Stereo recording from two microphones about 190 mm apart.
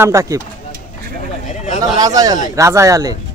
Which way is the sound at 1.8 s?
20° right (ahead or behind).